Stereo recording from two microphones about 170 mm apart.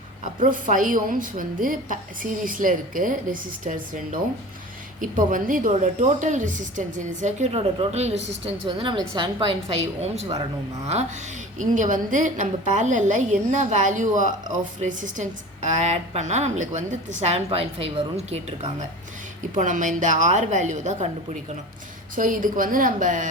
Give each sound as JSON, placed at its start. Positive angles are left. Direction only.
{"t": 0.3, "sound": "a woman's voice", "side_deg": -50}
{"t": 8.6, "sound": "a woman's voice", "side_deg": -25}
{"t": 19.5, "sound": "a woman's voice", "side_deg": -50}
{"t": 22.1, "sound": "a woman's voice", "side_deg": -50}